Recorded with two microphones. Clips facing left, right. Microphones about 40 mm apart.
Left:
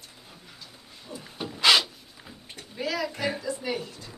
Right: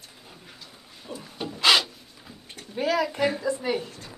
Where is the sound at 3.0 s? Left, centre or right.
Right.